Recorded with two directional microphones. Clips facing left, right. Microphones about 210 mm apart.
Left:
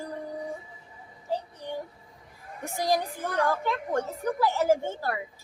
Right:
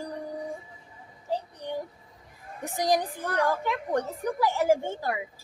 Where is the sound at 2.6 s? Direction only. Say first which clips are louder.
Right 1 dB; 15° right (ahead or behind).